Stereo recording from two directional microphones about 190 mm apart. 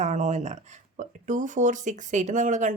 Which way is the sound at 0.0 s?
40° right (ahead or behind).